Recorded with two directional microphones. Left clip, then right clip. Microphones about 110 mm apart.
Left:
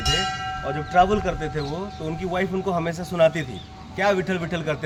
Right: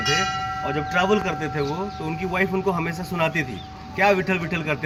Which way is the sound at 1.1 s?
25° left (ahead or behind).